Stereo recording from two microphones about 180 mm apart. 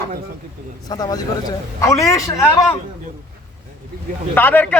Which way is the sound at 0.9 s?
20° left (ahead or behind).